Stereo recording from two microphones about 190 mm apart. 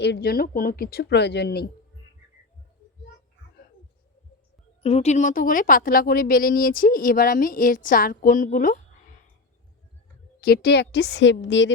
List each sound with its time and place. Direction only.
0.0 s speech: 60° left (ahead or behind)
4.8 s a woman's voice: 35° left (ahead or behind)
10.4 s speech: 55° left (ahead or behind); by 11.7 s 75° left (ahead or behind)